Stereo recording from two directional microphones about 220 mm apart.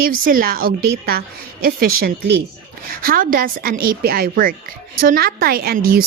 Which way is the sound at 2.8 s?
40° right (ahead or behind).